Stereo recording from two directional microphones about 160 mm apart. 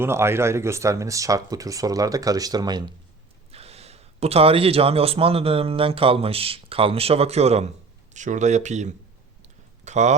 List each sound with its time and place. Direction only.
0.0 s speech: 15° right (ahead or behind)
3.5 s a man's voice: 40° right (ahead or behind)
9.4 s a sound: 45° right (ahead or behind)